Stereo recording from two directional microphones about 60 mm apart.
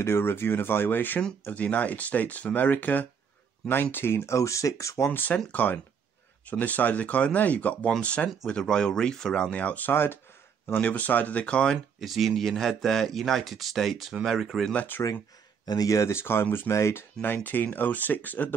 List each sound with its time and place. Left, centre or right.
0.0 s speech: left
4.4 s speech: left
5.1 s speech: left; by 11.8 s centre
12.0 s speech: centre
14.7 s speech: left
15.6 s speech: left
16.1 s speech: left
17.2 s speech: left